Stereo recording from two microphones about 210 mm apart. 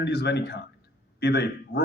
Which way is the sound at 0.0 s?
50° left (ahead or behind).